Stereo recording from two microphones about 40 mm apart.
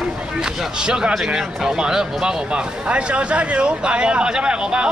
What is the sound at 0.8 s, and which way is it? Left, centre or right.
Speech, right.